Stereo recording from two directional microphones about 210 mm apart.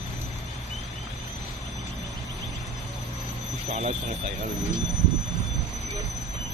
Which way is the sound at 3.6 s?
30° right (ahead or behind).